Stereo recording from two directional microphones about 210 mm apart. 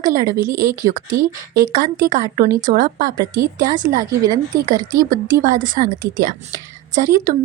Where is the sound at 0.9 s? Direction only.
40° right (ahead or behind).